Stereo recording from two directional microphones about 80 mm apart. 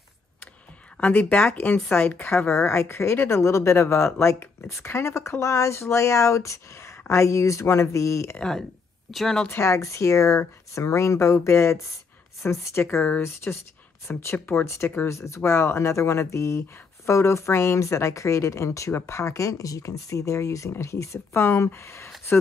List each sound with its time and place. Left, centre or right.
1.0 s speech: centre; by 8.4 s left
8.4 s speech: centre
9.5 s speech: left